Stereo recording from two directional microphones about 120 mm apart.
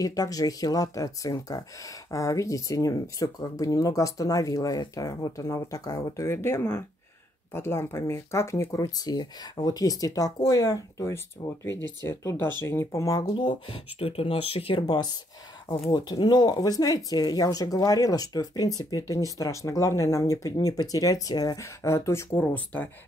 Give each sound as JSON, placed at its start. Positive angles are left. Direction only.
{"t": 0.0, "sound": "speech", "side_deg": 30}
{"t": 13.4, "sound": "speech", "side_deg": 40}
{"t": 13.9, "sound": "speech", "side_deg": 55}